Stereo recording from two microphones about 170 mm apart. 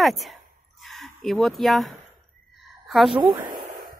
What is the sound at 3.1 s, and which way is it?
Speech, 30° right (ahead or behind).